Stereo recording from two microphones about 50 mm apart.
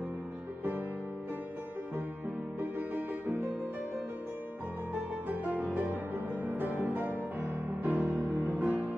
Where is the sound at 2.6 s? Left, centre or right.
Right.